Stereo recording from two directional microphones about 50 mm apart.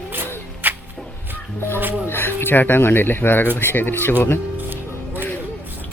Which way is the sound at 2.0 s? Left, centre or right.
Left.